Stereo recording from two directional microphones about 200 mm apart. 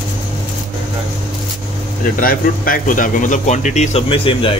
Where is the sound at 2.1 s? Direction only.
45° left (ahead or behind); by 4.6 s 25° left (ahead or behind).